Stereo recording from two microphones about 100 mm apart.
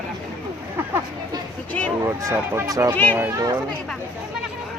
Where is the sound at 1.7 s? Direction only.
15° left (ahead or behind).